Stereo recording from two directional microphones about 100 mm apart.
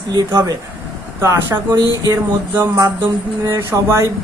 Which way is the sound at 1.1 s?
25° right (ahead or behind).